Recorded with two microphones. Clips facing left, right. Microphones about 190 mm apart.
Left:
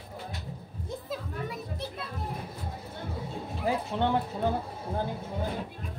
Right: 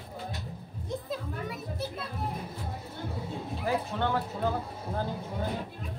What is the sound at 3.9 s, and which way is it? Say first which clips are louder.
Music: left 3 dB; 20° left (ahead or behind).